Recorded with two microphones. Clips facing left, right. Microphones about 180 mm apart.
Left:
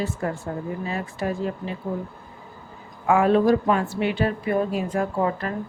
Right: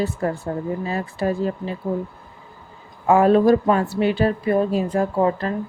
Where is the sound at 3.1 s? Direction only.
40° right (ahead or behind).